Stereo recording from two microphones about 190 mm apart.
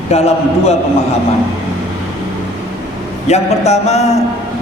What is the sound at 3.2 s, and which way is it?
Speech, 35° left (ahead or behind).